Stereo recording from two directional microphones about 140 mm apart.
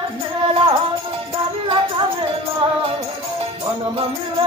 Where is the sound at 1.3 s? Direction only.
40° right (ahead or behind).